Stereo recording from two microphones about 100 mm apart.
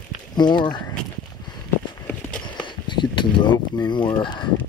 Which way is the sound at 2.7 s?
50° left (ahead or behind).